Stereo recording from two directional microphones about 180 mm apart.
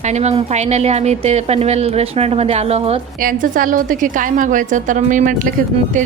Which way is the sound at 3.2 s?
50° right (ahead or behind).